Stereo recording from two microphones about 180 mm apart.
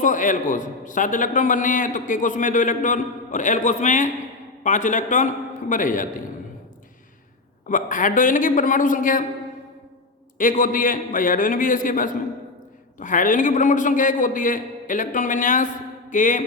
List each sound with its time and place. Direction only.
0.0 s a man's voice: 45° left (ahead or behind)
7.7 s a man's voice: 50° left (ahead or behind)
10.3 s a man's voice: 50° left (ahead or behind)